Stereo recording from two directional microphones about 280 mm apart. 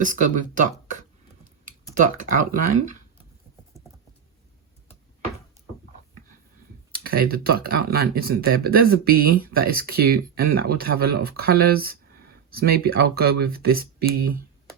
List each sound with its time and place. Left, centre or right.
0.0 s speech: right
6.9 s speech: right